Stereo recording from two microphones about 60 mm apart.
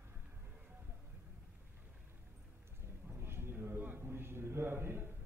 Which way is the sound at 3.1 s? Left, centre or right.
Right.